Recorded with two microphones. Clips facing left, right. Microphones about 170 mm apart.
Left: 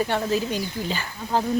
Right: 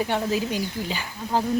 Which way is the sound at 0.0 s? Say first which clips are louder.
Left 1 dB; 10° right (ahead or behind).